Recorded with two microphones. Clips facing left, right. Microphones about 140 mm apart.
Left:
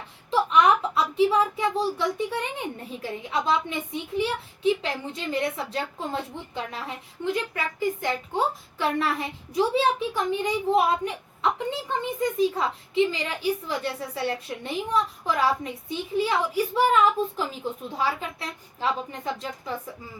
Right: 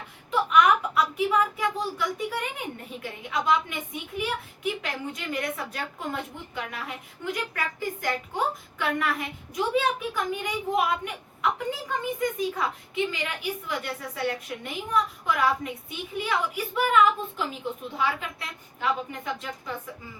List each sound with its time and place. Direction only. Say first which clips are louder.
0.3 s a woman's voice: left 1 dB; 30° left (ahead or behind)